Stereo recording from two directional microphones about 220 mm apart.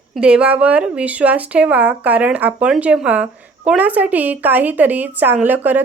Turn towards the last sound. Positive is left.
turn(degrees=-10)  # may be behind; listen again after turning